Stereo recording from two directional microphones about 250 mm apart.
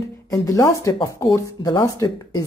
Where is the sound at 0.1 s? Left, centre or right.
Centre.